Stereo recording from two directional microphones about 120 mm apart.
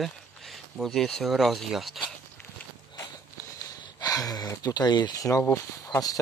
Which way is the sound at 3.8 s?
35° left (ahead or behind).